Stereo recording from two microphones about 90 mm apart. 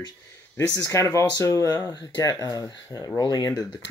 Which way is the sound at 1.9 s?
50° left (ahead or behind).